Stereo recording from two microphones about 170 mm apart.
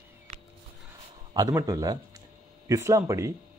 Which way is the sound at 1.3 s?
20° right (ahead or behind).